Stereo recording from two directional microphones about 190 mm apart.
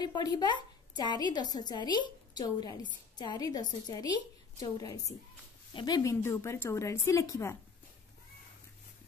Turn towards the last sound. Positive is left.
turn(degrees=15)  # may be behind; listen again after turning